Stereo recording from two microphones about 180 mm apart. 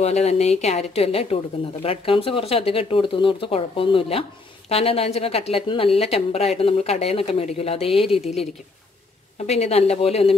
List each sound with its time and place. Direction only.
0.0 s speech: 35° left (ahead or behind)
9.4 s speech: 35° left (ahead or behind)